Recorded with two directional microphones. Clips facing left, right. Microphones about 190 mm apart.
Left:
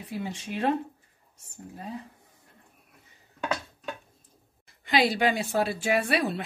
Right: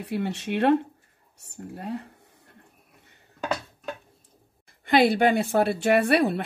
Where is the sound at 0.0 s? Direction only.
70° right (ahead or behind).